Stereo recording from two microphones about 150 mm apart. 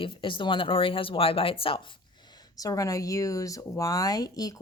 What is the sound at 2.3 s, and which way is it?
Speech, 25° left (ahead or behind).